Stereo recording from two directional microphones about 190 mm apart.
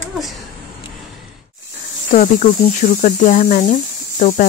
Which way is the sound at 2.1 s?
40° left (ahead or behind).